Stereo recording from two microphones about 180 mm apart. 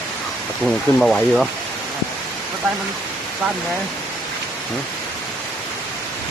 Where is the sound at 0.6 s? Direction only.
5° left (ahead or behind).